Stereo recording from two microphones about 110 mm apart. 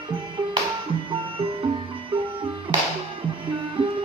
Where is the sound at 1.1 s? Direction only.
50° right (ahead or behind).